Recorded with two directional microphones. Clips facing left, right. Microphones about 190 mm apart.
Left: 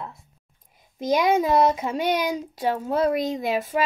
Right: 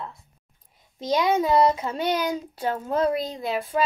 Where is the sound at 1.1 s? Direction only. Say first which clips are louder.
Left 1 dB; 10° left (ahead or behind).